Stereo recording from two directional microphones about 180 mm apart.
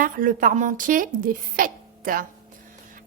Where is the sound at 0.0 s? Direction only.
50° right (ahead or behind).